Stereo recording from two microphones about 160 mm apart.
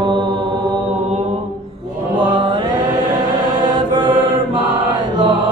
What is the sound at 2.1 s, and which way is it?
Chant, 30° right (ahead or behind).